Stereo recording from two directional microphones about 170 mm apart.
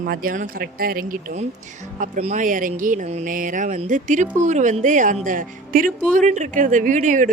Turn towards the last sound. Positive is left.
turn(degrees=-45)  # may be behind; listen again after turning